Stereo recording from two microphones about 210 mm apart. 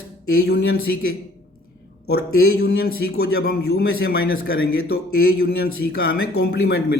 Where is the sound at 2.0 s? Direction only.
50° left (ahead or behind).